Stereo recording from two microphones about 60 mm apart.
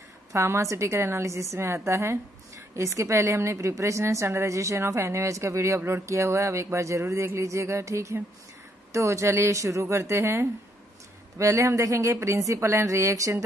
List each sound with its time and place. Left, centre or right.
0.3 s a woman's voice: right
11.3 s a woman's voice: right